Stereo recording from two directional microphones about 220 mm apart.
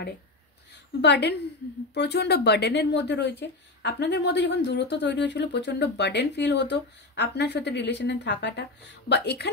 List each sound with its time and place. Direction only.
1.0 s speech: 50° left (ahead or behind)